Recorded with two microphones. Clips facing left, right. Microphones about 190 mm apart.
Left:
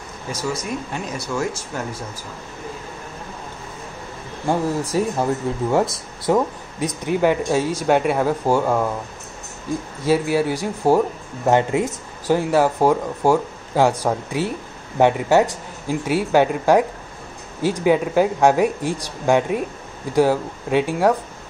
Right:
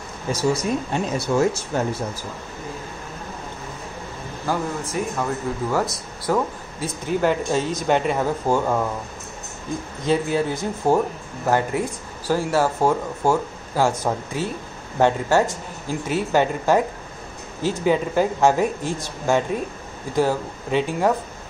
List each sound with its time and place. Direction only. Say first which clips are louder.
0.3 s speech: right 4 dB; 30° right (ahead or behind)
4.5 s speech: left 5 dB; 30° left (ahead or behind); by 8.8 s 15° left (ahead or behind)
10.0 s speech: left 2 dB; 10° left (ahead or behind)